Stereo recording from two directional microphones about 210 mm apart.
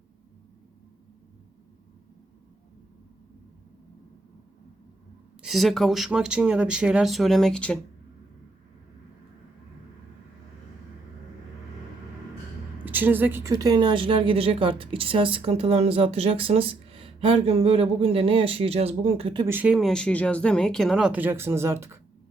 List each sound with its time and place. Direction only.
5.4 s speech: centre (ahead or behind)
12.8 s speech: 10° right (ahead or behind); by 19.5 s 25° right (ahead or behind)
19.5 s speech: 5° right (ahead or behind)